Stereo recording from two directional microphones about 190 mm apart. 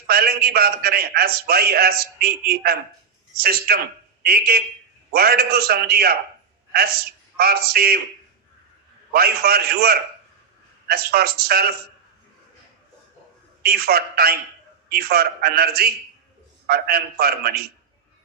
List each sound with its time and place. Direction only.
0.1 s a man's voice: 55° right (ahead or behind)
9.1 s a man's voice: 55° right (ahead or behind)
13.6 s a man's voice: 55° right (ahead or behind)